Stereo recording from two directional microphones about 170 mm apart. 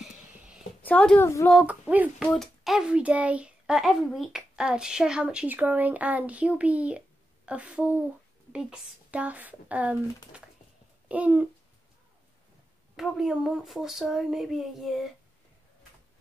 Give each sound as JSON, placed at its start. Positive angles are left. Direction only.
{"t": 0.0, "sound": "a sound", "side_deg": -5}
{"t": 0.8, "sound": "a child's voice", "side_deg": 10}
{"t": 1.5, "sound": "speech", "side_deg": -5}
{"t": 2.2, "sound": "a child's voice", "side_deg": 0}
{"t": 12.9, "sound": "a child's voice", "side_deg": 0}